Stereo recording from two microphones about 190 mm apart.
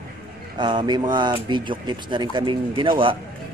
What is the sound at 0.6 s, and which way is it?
Speech, 25° right (ahead or behind).